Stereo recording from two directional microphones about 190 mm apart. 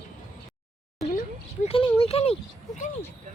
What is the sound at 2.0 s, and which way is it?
Speech, 30° left (ahead or behind).